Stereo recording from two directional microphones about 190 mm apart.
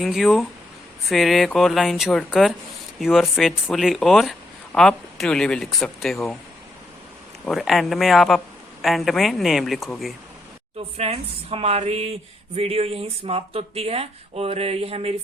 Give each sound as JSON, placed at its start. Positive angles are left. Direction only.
{"t": 0.0, "sound": "speech", "side_deg": 0}
{"t": 7.4, "sound": "speech", "side_deg": 0}
{"t": 10.9, "sound": "speech", "side_deg": -30}